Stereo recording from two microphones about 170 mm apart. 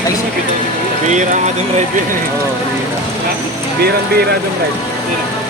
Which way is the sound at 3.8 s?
70° right (ahead or behind).